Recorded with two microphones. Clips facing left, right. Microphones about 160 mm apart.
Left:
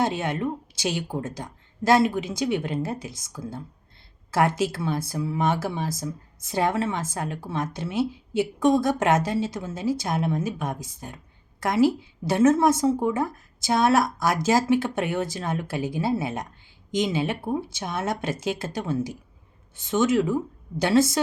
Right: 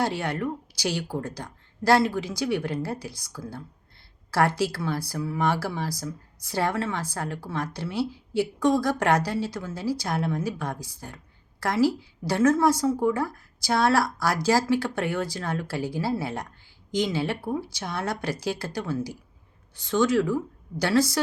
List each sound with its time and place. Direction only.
0.0 s speech: 20° left (ahead or behind)